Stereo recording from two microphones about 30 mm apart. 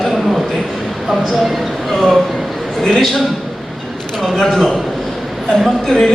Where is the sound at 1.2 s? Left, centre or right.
Centre.